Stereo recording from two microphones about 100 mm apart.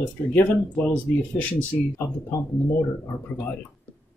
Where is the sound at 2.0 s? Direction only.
30° left (ahead or behind).